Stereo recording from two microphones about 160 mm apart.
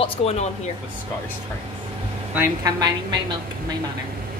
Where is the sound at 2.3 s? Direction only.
20° right (ahead or behind).